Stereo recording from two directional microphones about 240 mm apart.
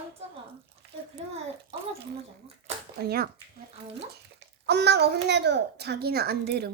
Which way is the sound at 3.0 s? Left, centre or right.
Right.